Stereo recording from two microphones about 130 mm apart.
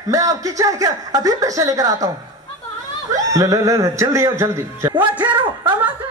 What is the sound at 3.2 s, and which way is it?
A man's voice, 25° right (ahead or behind).